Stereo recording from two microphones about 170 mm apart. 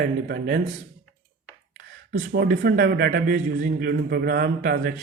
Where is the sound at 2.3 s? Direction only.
70° right (ahead or behind).